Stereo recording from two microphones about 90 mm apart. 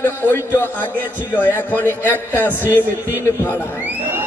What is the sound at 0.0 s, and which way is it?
A man's voice, 25° left (ahead or behind).